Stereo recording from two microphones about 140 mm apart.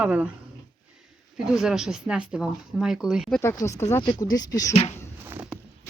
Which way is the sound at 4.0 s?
30° left (ahead or behind).